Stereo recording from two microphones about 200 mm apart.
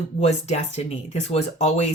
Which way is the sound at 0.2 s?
35° left (ahead or behind).